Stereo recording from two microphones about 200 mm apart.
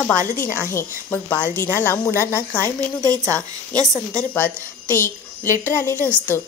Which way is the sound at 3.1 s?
15° right (ahead or behind).